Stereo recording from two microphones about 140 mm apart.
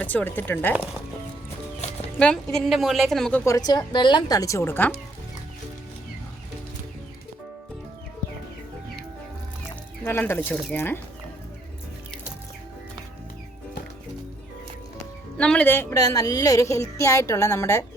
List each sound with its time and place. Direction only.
0.0 s speech: 10° left (ahead or behind)
2.1 s a woman's voice: 5° left (ahead or behind)
3.4 s a woman's voice: 25° left (ahead or behind)
10.0 s speech: 15° left (ahead or behind)
15.4 s a woman's voice: 10° left (ahead or behind)